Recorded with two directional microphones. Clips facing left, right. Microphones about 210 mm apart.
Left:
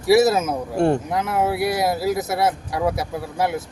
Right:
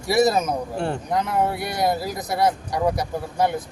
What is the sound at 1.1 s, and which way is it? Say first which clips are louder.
Speech: left 1 dB; 5° left (ahead or behind).